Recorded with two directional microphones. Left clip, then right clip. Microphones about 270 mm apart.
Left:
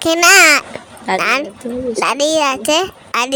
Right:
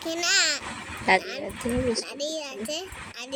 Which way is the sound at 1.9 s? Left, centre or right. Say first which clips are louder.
Left 16 dB; left.